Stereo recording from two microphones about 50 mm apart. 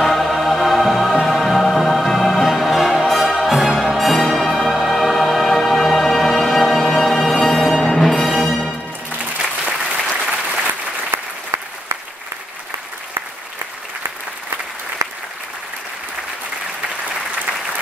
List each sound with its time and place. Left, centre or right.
0.0 s music: centre
9.7 s applause: right
15.0 s applause: right